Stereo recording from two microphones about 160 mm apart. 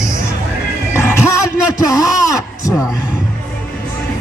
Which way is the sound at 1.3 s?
20° left (ahead or behind).